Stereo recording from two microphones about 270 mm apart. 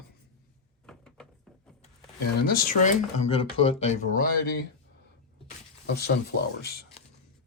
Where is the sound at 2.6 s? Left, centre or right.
Left.